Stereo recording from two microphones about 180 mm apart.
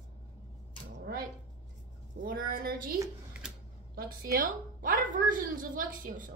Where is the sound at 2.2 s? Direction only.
55° right (ahead or behind).